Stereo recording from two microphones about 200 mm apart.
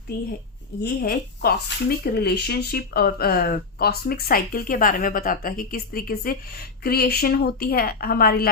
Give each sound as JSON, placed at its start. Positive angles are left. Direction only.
{"t": 0.8, "sound": "speech", "side_deg": 50}